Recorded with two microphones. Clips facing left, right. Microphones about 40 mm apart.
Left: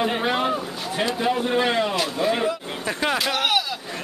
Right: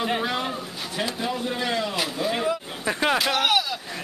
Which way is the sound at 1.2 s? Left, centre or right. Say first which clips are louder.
Left 8 dB; left.